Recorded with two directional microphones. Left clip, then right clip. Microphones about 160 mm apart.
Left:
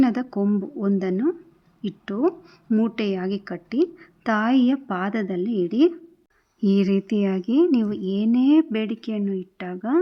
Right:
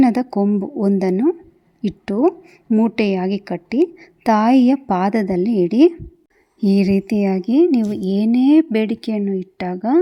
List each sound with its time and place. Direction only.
0.0 s a woman's voice: 30° right (ahead or behind)
2.1 s speech: 15° right (ahead or behind)
2.9 s a woman's voice: 30° right (ahead or behind)